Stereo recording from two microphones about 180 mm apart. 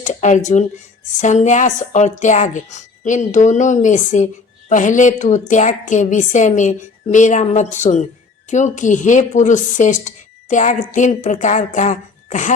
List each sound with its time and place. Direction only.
0.0 s a woman's voice: 40° left (ahead or behind)